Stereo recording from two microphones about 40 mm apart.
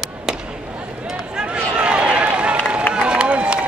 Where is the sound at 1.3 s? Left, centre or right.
Right.